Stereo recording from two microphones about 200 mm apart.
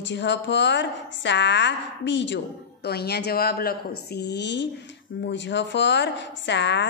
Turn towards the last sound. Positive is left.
turn(degrees=60)  # may be behind; listen again after turning